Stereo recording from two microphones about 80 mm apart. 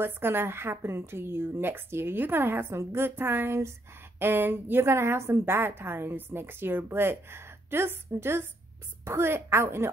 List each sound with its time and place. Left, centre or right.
0.0 s a woman's voice: right